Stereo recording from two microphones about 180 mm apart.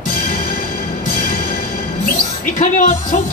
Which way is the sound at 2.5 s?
45° left (ahead or behind).